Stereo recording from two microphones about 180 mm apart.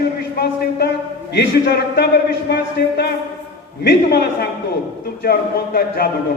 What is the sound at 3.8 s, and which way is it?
A man's voice, 60° left (ahead or behind).